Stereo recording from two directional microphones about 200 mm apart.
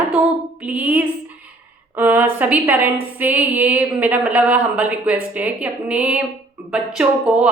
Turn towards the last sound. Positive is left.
turn(degrees=-5)  # may be behind; listen again after turning